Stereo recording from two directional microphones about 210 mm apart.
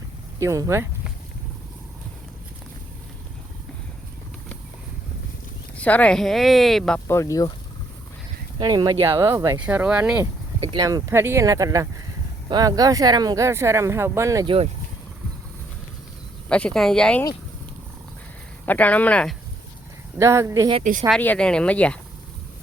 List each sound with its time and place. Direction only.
0.3 s speech: 15° right (ahead or behind)
5.7 s speech: 5° left (ahead or behind)
8.5 s speech: 20° right (ahead or behind)
10.6 s speech: 20° right (ahead or behind)
16.5 s speech: 5° left (ahead or behind)
18.6 s speech: 10° left (ahead or behind)
20.1 s speech: 15° right (ahead or behind)
21.1 s speech: 5° left (ahead or behind)